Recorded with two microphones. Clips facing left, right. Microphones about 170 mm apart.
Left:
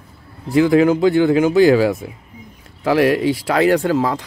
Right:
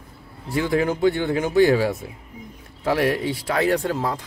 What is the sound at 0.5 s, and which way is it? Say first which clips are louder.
Speech: left 9 dB; 90° left.